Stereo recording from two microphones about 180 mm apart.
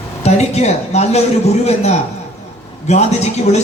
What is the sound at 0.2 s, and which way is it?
A man's voice, 40° left (ahead or behind).